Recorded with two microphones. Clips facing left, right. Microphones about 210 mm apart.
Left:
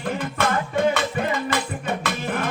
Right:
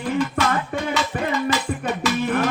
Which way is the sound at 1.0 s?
55° left (ahead or behind).